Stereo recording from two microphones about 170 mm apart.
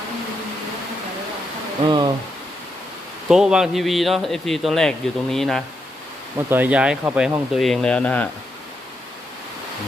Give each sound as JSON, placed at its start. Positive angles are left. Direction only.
{"t": 1.8, "sound": "speech", "side_deg": -25}
{"t": 3.2, "sound": "a man's voice", "side_deg": -5}
{"t": 6.5, "sound": "speech", "side_deg": -10}
{"t": 7.5, "sound": "a man's voice", "side_deg": 0}